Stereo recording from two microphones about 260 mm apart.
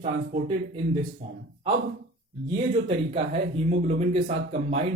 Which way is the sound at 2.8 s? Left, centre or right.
Right.